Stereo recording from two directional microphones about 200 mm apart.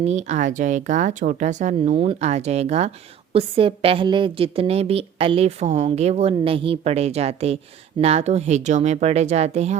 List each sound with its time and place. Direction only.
0.0 s a woman's voice: 35° right (ahead or behind)